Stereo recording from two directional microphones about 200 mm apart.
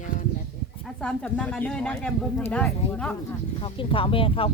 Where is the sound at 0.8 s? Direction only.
5° left (ahead or behind).